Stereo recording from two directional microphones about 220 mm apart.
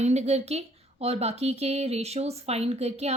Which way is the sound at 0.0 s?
30° right (ahead or behind).